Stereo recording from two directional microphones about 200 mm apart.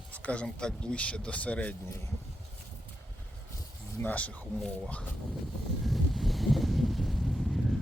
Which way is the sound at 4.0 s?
5° left (ahead or behind).